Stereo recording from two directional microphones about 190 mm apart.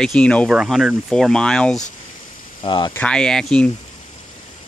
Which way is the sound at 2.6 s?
25° left (ahead or behind).